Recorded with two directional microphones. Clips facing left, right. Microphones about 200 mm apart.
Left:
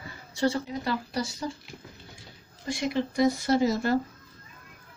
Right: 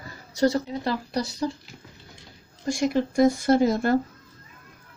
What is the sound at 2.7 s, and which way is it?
Speech, 45° right (ahead or behind).